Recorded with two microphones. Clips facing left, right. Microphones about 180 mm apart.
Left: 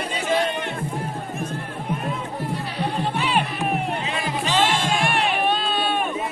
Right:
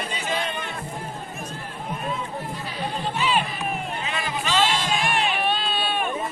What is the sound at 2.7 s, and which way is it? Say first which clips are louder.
Music: left 2 dB; 65° left (ahead or behind).